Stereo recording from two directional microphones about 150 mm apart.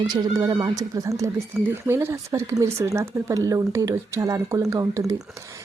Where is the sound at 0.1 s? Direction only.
25° right (ahead or behind).